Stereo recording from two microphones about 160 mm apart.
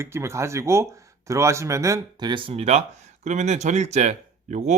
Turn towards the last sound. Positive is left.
turn(degrees=-45)  # may be behind; listen again after turning